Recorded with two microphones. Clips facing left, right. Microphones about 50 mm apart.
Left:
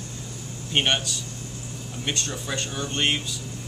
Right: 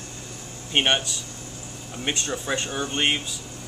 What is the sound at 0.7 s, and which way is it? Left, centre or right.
Speech, centre.